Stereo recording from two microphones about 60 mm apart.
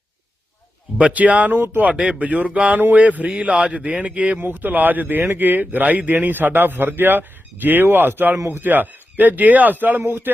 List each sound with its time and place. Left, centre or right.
0.9 s speech: right